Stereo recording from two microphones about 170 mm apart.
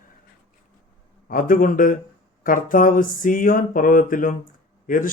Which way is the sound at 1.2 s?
55° left (ahead or behind).